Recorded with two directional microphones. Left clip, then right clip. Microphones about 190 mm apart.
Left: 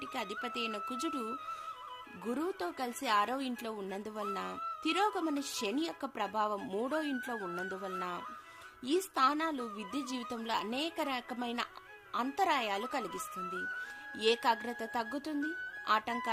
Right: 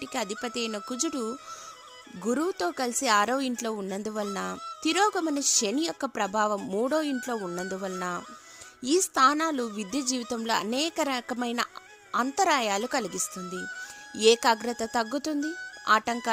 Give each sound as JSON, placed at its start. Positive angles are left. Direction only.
{"t": 0.0, "sound": "speech", "side_deg": -45}